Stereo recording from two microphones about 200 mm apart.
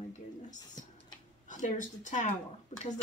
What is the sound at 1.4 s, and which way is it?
Speech, 40° left (ahead or behind).